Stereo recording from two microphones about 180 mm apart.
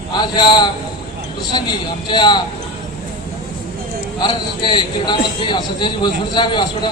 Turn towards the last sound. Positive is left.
turn(degrees=25)  # may be behind; listen again after turning